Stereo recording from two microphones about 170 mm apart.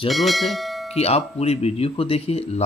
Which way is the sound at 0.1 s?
Centre (ahead or behind).